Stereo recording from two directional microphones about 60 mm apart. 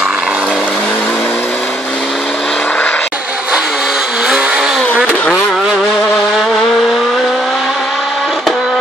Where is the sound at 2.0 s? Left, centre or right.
Centre.